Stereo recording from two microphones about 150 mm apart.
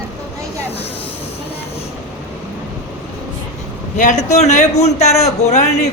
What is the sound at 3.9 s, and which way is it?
A man's voice, 55° left (ahead or behind).